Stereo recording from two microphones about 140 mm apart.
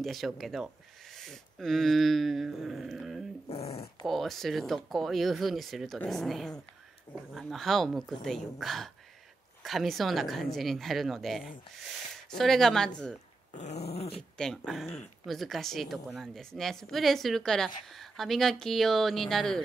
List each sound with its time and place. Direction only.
0.0 s a woman's voice: centre (ahead or behind)
1.1 s dog: 5° left (ahead or behind)
3.4 s dog: 45° left (ahead or behind)
4.1 s a woman's voice: centre (ahead or behind)
13.5 s dog: 55° left (ahead or behind)
14.3 s a woman's voice: 5° left (ahead or behind)